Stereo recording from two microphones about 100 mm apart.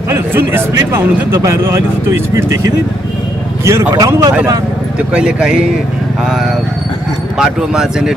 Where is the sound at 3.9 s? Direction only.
35° right (ahead or behind).